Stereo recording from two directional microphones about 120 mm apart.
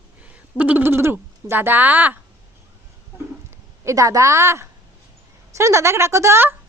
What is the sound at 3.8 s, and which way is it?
A woman's voice, 25° right (ahead or behind).